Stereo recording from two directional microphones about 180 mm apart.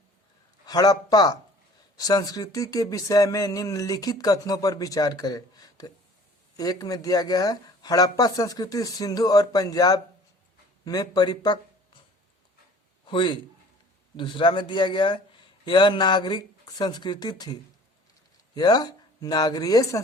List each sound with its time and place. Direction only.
0.6 s speech: 20° left (ahead or behind)
13.1 s a man's voice: 25° left (ahead or behind)